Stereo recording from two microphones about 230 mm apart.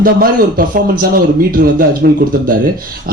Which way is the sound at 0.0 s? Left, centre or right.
Right.